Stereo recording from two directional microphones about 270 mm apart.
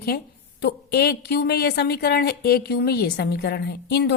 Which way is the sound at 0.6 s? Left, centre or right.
Left.